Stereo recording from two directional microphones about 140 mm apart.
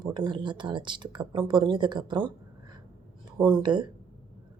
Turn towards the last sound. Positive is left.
turn(degrees=-35)  # may be behind; listen again after turning